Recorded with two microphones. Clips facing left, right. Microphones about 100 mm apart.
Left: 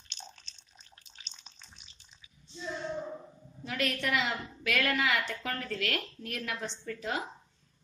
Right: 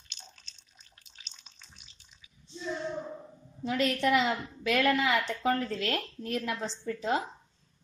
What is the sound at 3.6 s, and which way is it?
A woman's voice, 30° right (ahead or behind).